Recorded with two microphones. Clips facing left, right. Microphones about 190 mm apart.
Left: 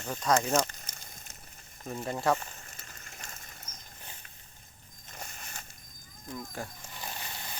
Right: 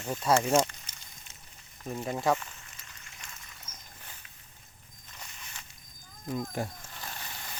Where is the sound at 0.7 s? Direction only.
45° left (ahead or behind).